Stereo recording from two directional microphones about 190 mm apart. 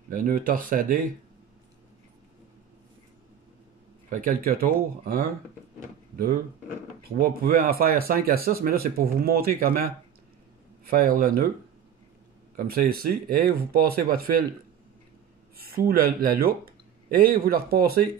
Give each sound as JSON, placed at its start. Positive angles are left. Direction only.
{"t": 0.1, "sound": "speech", "side_deg": -45}
{"t": 4.1, "sound": "speech", "side_deg": -45}
{"t": 7.1, "sound": "speech", "side_deg": -50}
{"t": 12.5, "sound": "speech", "side_deg": -50}
{"t": 15.6, "sound": "speech", "side_deg": -50}